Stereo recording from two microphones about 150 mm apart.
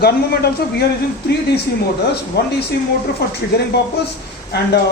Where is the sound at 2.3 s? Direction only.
90° left.